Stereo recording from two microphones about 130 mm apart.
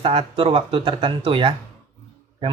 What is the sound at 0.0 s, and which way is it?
Speech, 45° right (ahead or behind).